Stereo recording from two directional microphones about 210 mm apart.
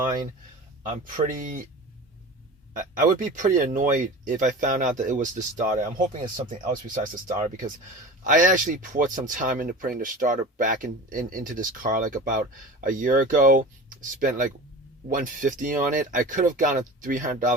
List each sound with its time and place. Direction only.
0.8 s speech: 40° right (ahead or behind)
2.7 s speech: 40° right (ahead or behind)